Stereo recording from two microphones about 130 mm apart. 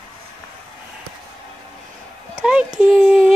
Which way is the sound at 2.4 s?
5° right (ahead or behind).